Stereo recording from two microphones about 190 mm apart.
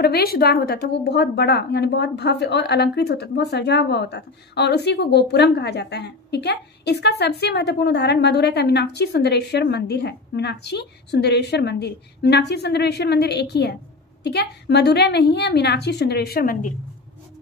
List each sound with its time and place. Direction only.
0.0 s a woman's voice: 55° left (ahead or behind)